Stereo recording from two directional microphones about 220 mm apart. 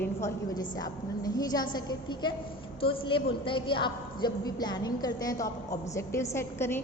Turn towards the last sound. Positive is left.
turn(degrees=10)  # may be behind; listen again after turning